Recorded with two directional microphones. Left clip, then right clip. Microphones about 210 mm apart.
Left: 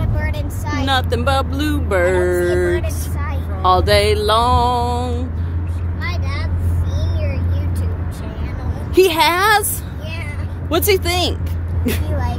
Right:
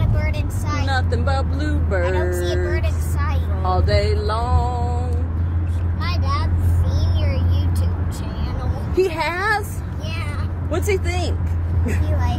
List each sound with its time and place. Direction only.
0.2 s music: 30° left (ahead or behind)
3.6 s music: 35° left (ahead or behind)
8.9 s a woman's voice: 30° left (ahead or behind)
10.7 s a woman's voice: 25° left (ahead or behind)
11.8 s speech: 40° left (ahead or behind)